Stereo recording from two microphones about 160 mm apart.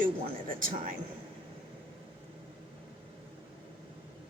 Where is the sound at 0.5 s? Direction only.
60° right (ahead or behind).